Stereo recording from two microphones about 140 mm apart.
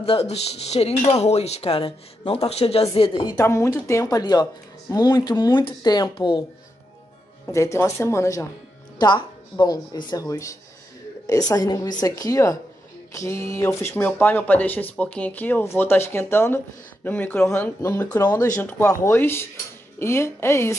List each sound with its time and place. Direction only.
0.0 s speech: 45° left (ahead or behind)
3.3 s speech: 20° left (ahead or behind)
7.5 s speech: 20° left (ahead or behind)
9.0 s speech: 30° left (ahead or behind)